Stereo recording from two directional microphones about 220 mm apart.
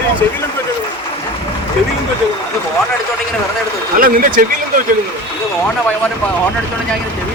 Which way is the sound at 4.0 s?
40° right (ahead or behind).